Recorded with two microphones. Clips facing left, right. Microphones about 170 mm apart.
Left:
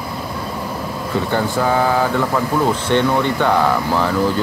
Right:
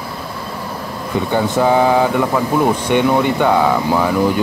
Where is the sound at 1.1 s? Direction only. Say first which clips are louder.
Right 3 dB; 20° right (ahead or behind).